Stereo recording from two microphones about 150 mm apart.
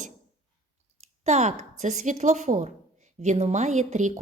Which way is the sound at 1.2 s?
50° right (ahead or behind).